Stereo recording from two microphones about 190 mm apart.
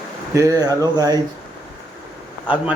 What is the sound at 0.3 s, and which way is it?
Speech, 20° right (ahead or behind).